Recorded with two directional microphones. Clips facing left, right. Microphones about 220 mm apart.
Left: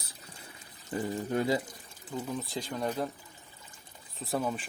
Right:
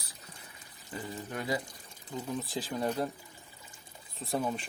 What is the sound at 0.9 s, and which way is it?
Speech, 30° left (ahead or behind).